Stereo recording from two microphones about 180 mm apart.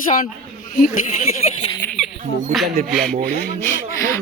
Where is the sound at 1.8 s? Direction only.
15° left (ahead or behind).